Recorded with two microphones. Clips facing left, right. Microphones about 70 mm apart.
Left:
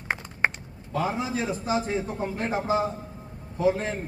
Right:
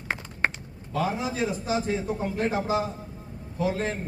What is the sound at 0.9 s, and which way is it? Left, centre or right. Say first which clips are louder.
Speech: even; left.